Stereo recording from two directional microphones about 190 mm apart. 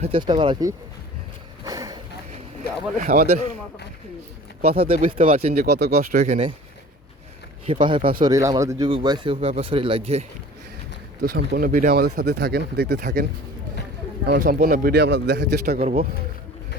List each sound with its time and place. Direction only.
0.0 s speech: 25° right (ahead or behind)
1.6 s a sound: 20° right (ahead or behind)
3.0 s a man's voice: 55° right (ahead or behind)
4.8 s speech: 30° right (ahead or behind)
5.5 s speech: 60° right (ahead or behind); by 6.4 s 40° right (ahead or behind)
7.7 s speech: 25° right (ahead or behind)
11.2 s speech: 50° right (ahead or behind)
11.9 s a man's voice: 55° right (ahead or behind)
14.3 s a man's voice: 50° right (ahead or behind)